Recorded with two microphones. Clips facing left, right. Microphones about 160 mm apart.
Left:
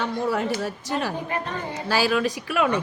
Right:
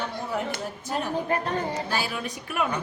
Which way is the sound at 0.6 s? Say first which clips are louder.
Left 3 dB; 90° left.